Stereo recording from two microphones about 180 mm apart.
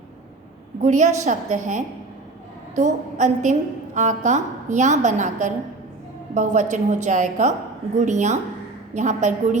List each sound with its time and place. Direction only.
0.8 s a woman's voice: 40° right (ahead or behind)